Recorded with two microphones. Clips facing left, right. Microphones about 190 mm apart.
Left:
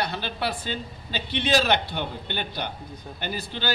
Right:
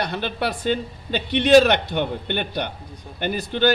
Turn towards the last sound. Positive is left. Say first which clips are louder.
# right 9 dB
turn(degrees=-55)  # may be behind; listen again after turning